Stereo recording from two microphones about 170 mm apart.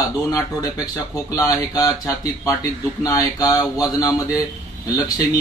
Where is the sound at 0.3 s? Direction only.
20° left (ahead or behind).